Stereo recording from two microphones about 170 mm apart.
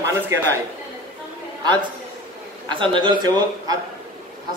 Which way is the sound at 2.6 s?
30° right (ahead or behind).